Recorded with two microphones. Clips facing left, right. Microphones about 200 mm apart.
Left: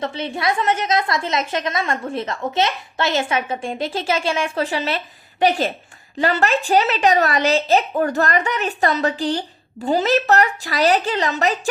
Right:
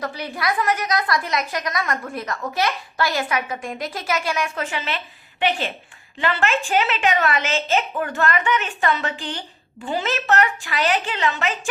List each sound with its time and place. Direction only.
0.0 s a woman's voice: 25° left (ahead or behind)